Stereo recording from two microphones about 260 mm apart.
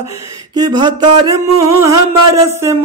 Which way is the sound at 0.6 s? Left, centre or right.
Centre.